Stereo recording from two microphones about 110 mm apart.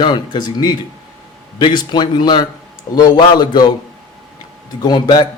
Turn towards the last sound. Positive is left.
turn(degrees=45)  # may be behind; listen again after turning